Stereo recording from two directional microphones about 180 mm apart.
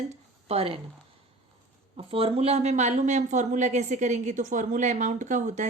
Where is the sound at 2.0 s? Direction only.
30° right (ahead or behind).